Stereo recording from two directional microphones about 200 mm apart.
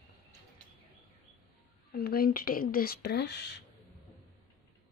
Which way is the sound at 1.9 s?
50° left (ahead or behind).